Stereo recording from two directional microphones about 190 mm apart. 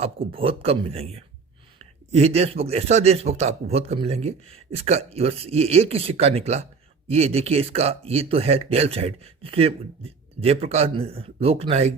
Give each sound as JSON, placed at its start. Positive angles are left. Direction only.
{"t": 0.0, "sound": "a man's voice", "side_deg": -30}